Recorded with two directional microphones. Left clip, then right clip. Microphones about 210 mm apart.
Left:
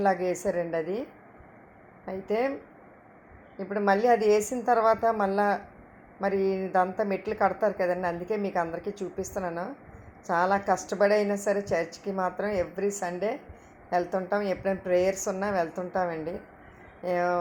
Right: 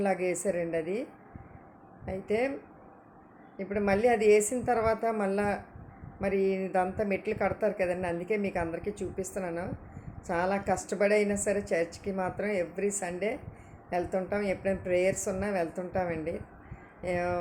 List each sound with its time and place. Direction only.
0.0 s a woman's voice: centre (ahead or behind)
2.0 s a woman's voice: centre (ahead or behind)
3.6 s a woman's voice: centre (ahead or behind)